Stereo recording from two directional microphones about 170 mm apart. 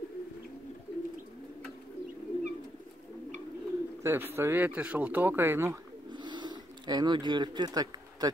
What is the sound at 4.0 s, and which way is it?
Speech, 15° right (ahead or behind).